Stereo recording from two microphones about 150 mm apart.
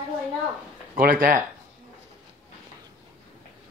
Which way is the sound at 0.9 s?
65° right (ahead or behind).